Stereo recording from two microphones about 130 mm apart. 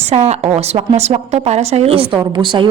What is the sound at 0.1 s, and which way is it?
A woman's voice, 55° right (ahead or behind).